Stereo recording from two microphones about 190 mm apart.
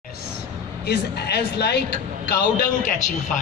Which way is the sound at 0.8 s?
60° left (ahead or behind).